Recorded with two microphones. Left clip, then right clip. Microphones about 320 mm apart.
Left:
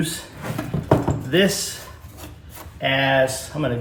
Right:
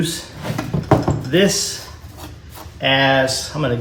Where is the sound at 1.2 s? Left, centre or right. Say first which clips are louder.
Right 3 dB; centre.